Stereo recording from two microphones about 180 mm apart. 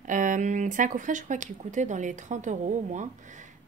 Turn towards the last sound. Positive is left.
turn(degrees=-40)  # may be behind; listen again after turning